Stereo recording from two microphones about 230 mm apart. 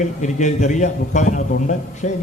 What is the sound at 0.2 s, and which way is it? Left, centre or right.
A man's voice, left.